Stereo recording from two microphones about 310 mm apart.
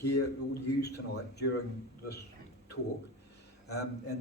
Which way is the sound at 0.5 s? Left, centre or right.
Left.